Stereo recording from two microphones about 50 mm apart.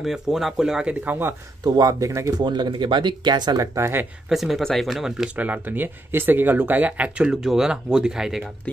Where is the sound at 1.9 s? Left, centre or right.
Right.